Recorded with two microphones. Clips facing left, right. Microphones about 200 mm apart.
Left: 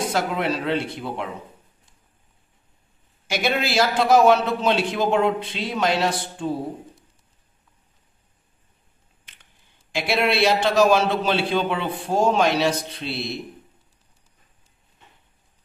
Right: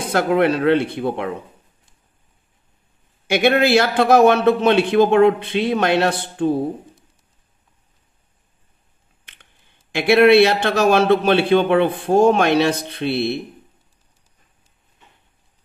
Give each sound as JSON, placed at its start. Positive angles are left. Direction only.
{"t": 0.1, "sound": "a man's voice", "side_deg": -60}
{"t": 3.3, "sound": "a man's voice", "side_deg": -60}
{"t": 9.9, "sound": "a man's voice", "side_deg": -60}